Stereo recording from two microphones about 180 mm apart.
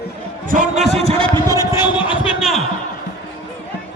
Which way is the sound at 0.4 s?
45° right (ahead or behind).